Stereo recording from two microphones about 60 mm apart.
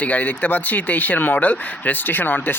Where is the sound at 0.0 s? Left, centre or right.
Left.